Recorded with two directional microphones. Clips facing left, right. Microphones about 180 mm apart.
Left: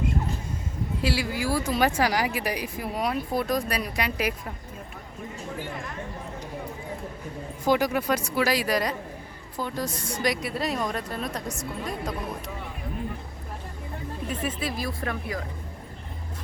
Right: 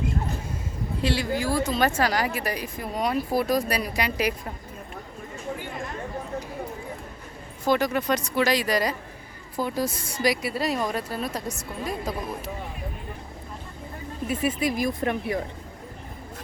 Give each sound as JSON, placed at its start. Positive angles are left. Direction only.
{"t": 1.0, "sound": "speech", "side_deg": 5}
{"t": 7.6, "sound": "a woman's voice", "side_deg": 10}
{"t": 14.3, "sound": "speech", "side_deg": -10}